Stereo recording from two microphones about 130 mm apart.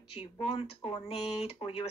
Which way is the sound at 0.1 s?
50° left (ahead or behind).